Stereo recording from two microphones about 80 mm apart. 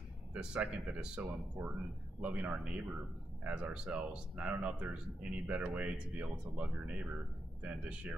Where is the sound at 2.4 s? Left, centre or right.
Centre.